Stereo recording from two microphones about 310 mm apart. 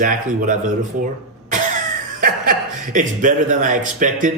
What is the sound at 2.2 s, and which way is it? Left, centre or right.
A man's voice, right.